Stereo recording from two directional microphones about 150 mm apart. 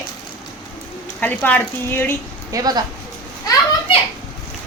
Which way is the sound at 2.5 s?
25° right (ahead or behind).